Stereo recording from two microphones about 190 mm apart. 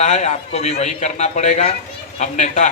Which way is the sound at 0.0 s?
35° left (ahead or behind).